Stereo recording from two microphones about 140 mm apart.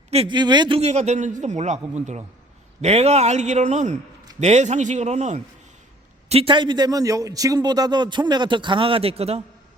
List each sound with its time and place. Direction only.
0.3 s a man's voice: 30° right (ahead or behind)
0.8 s speech: 55° right (ahead or behind)
2.8 s speech: 50° right (ahead or behind)
6.2 s a man's voice: 45° right (ahead or behind)